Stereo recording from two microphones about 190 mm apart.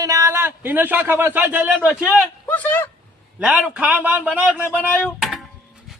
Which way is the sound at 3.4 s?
5° right (ahead or behind).